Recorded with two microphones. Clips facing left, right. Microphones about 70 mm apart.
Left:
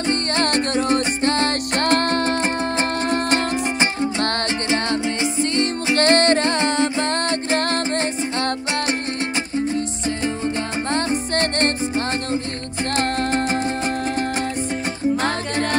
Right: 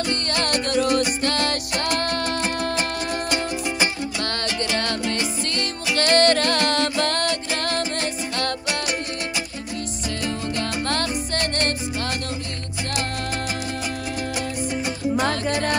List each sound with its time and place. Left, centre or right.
0.0 s music: left
10.2 s music: left
12.9 s music: left